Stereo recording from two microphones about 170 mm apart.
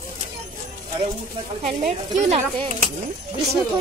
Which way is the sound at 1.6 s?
40° right (ahead or behind).